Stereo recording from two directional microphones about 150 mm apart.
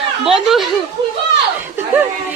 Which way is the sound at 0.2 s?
Centre (ahead or behind).